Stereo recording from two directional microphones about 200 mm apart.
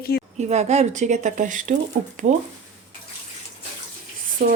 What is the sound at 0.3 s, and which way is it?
Speech, 35° right (ahead or behind).